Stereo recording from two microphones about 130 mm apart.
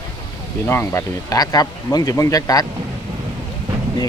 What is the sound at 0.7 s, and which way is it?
Speech, 20° left (ahead or behind).